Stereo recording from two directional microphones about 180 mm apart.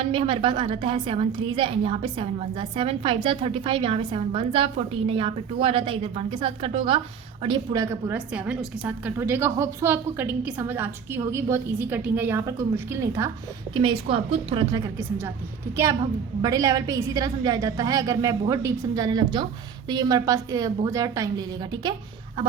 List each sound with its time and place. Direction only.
0.0 s a woman's voice: 30° right (ahead or behind)
13.7 s a woman's voice: 30° right (ahead or behind)
15.7 s a woman's voice: 15° right (ahead or behind)